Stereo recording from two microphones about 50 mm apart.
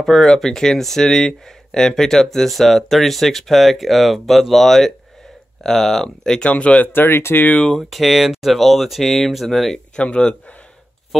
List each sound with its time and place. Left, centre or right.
0.0 s speech: centre
6.4 s speech: left
6.9 s speech: left
7.9 s speech: centre
9.9 s speech: left